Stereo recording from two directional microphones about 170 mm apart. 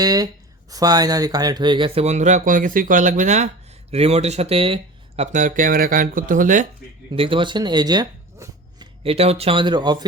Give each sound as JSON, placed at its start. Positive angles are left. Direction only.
{"t": 0.0, "sound": "speech", "side_deg": -20}
{"t": 7.1, "sound": "speech", "side_deg": -30}
{"t": 9.1, "sound": "speech", "side_deg": -35}